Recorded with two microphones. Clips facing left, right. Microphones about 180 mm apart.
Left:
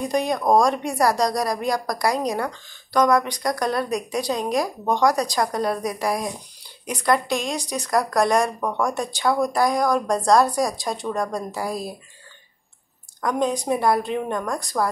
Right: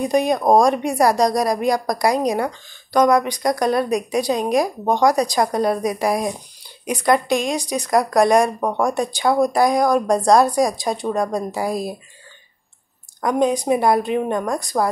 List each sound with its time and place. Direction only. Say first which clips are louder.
0.0 s a woman's voice: right 5 dB; 15° right (ahead or behind)
8.5 s speech: right 4 dB; 25° right (ahead or behind)
8.9 s a woman's voice: right 4 dB; 15° right (ahead or behind)
13.2 s a woman's voice: right 4 dB; 15° right (ahead or behind)